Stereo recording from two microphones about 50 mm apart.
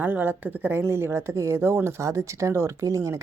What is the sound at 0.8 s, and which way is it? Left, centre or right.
Speech, right.